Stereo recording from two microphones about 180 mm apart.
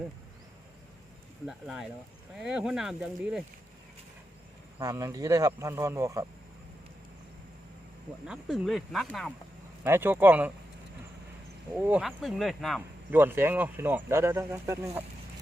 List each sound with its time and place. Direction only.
1.5 s speech: centre (ahead or behind)
4.8 s speech: 20° right (ahead or behind)
8.3 s speech: centre (ahead or behind)
9.8 s speech: 10° right (ahead or behind)
11.9 s speech: 5° right (ahead or behind)
13.1 s speech: 10° right (ahead or behind)